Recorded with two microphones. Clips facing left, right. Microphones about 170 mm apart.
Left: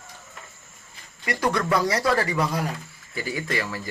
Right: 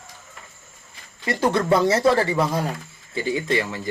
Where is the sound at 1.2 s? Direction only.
30° right (ahead or behind).